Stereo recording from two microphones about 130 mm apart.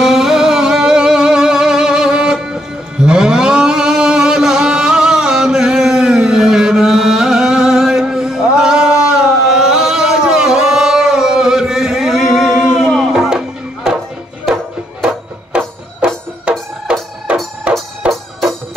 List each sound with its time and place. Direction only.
0.0 s music: 5° right (ahead or behind)
15.5 s music: 5° right (ahead or behind)